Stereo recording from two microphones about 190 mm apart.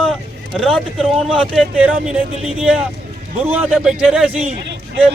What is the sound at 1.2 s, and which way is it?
A man's voice, centre (ahead or behind).